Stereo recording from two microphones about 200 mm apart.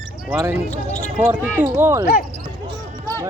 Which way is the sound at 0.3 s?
10° right (ahead or behind).